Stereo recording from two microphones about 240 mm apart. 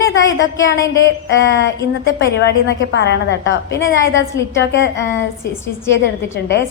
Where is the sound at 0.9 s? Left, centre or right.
Left.